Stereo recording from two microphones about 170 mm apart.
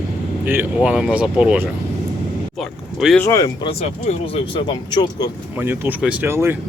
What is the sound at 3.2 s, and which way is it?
Speech, 20° left (ahead or behind).